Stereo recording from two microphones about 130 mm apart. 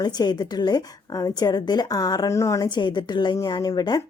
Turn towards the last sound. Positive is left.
turn(degrees=30)  # may be behind; listen again after turning